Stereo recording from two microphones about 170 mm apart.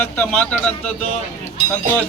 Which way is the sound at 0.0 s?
10° left (ahead or behind).